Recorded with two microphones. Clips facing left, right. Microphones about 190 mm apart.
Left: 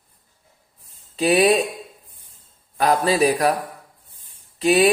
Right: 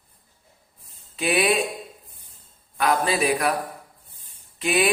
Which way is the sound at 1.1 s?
35° left (ahead or behind).